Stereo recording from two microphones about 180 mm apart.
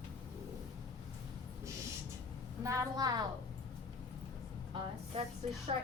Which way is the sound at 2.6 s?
15° right (ahead or behind).